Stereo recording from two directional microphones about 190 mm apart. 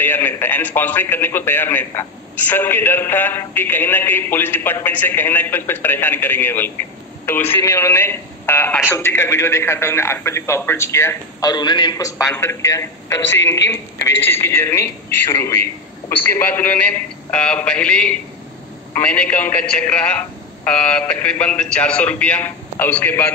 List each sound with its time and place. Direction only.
0.0 s a man's voice: 10° left (ahead or behind)